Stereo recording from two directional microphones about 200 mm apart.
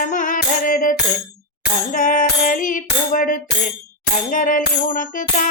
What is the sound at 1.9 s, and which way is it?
Music, 40° left (ahead or behind).